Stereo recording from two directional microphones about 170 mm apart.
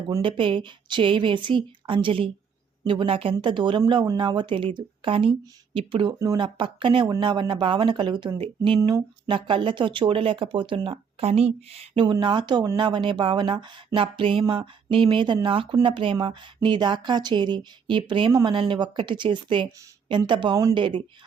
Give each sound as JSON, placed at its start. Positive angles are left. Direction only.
{"t": 0.2, "sound": "speech", "side_deg": -30}
{"t": 6.1, "sound": "speech", "side_deg": -20}
{"t": 6.4, "sound": "speech", "side_deg": -30}
{"t": 18.5, "sound": "speech", "side_deg": -30}